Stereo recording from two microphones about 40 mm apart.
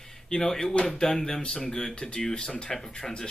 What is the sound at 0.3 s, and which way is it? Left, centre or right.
Speech, centre.